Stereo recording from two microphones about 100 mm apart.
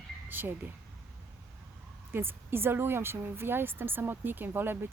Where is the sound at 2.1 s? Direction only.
20° right (ahead or behind).